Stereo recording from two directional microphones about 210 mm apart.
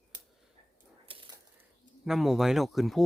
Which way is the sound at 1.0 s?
25° right (ahead or behind).